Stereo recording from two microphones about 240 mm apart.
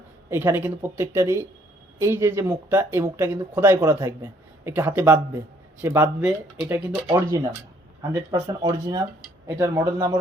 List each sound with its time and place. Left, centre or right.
0.3 s speech: centre